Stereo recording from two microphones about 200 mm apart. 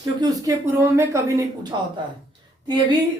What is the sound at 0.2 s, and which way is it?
Speech, 15° right (ahead or behind).